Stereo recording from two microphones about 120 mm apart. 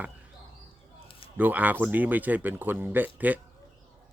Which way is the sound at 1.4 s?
15° right (ahead or behind).